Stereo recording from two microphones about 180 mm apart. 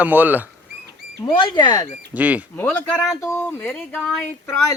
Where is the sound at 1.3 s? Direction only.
25° left (ahead or behind).